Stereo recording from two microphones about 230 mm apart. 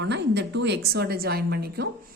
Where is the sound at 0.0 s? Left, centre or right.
Right.